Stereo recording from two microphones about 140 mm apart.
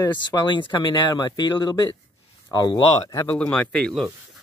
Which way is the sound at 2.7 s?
40° left (ahead or behind).